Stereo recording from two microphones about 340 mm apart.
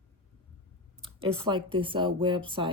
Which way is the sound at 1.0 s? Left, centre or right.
Centre.